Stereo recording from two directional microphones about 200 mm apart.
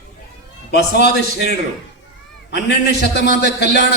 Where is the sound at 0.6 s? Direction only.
55° left (ahead or behind).